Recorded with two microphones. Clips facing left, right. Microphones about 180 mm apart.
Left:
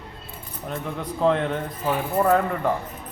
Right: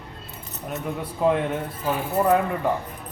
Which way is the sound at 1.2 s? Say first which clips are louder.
Even; 10° right (ahead or behind).